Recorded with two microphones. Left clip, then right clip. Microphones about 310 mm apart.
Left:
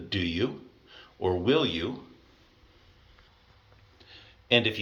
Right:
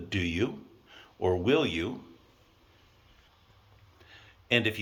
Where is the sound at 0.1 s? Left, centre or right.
Centre.